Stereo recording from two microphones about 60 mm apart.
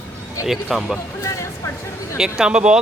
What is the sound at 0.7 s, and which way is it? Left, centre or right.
Speech, centre.